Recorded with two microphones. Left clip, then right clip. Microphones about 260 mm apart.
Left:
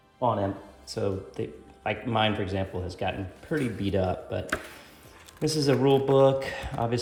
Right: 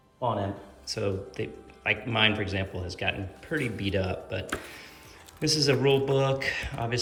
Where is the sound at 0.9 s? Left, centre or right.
Centre.